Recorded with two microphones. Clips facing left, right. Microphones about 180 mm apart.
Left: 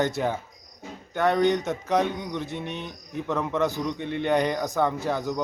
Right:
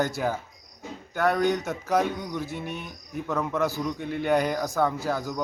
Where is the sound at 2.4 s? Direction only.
20° left (ahead or behind).